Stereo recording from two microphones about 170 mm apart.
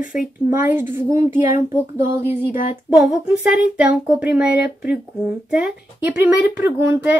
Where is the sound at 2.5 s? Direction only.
55° left (ahead or behind).